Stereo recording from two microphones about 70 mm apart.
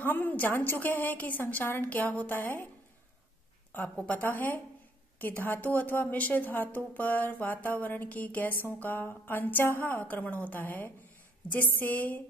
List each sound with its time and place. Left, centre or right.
0.0 s a woman's voice: left
3.9 s a woman's voice: centre